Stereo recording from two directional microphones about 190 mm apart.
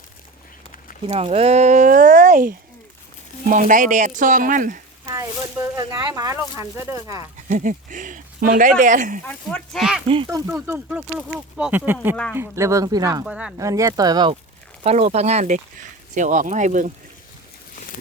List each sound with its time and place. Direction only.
1.0 s speech: 30° right (ahead or behind)
5.0 s speech: 20° right (ahead or behind)
7.4 s speech: 40° right (ahead or behind)
9.2 s speech: 5° left (ahead or behind)
10.2 s speech: 15° right (ahead or behind)
13.2 s speech: 5° right (ahead or behind)
13.6 s speech: 15° right (ahead or behind)
14.8 s speech: 35° right (ahead or behind)